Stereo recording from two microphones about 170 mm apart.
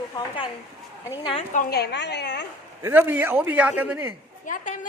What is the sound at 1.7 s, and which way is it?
Speech, 75° left (ahead or behind).